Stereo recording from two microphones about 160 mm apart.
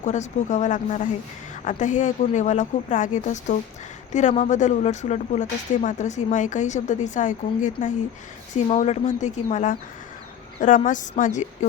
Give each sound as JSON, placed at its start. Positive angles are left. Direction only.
{"t": 0.0, "sound": "a woman's voice", "side_deg": 45}